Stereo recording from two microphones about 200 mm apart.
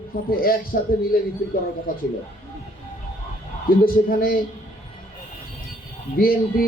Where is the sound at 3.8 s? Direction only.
45° left (ahead or behind).